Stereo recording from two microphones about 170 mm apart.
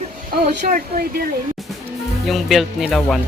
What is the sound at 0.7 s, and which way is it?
Speech, 55° right (ahead or behind).